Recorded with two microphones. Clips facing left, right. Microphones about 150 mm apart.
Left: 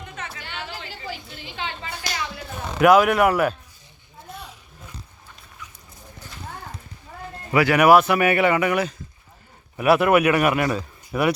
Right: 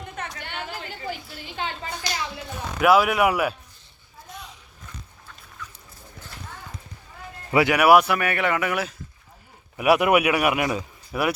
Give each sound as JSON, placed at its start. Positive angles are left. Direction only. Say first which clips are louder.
{"t": 0.3, "sound": "a sound", "louder": "right 1 dB", "side_deg": -55}
{"t": 1.5, "sound": "speech", "louder": "right 1 dB", "side_deg": -45}
{"t": 2.8, "sound": "speech", "louder": "left 3 dB", "side_deg": -5}
{"t": 7.5, "sound": "speech", "louder": "left 1 dB", "side_deg": -20}
{"t": 7.8, "sound": "a man's voice", "louder": "left 2 dB", "side_deg": -10}
{"t": 8.0, "sound": "a man's voice", "louder": "left 5 dB", "side_deg": 5}